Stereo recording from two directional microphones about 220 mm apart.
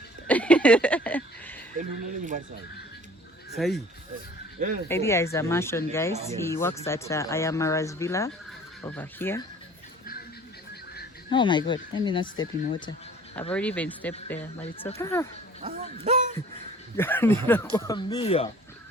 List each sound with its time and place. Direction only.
0.3 s a sound: 5° left (ahead or behind)
1.8 s speech: 35° right (ahead or behind)
3.5 s speech: centre (ahead or behind)
4.9 s speech: 10° left (ahead or behind)
11.3 s speech: 20° left (ahead or behind)
13.5 s speech: 5° left (ahead or behind)
15.6 s a sound: 30° right (ahead or behind)
17.0 s speech: 10° left (ahead or behind); by 18.4 s 25° left (ahead or behind)